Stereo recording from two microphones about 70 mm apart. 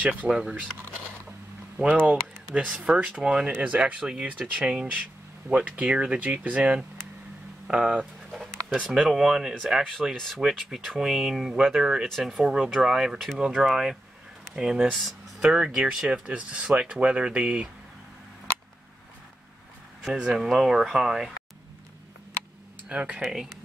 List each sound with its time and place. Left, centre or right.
0.2 s speech: centre
2.5 s speech: centre
10.1 s speech: centre
14.9 s speech: centre
15.5 s speech: centre
20.0 s speech: centre
22.8 s speech: centre
23.2 s speech: centre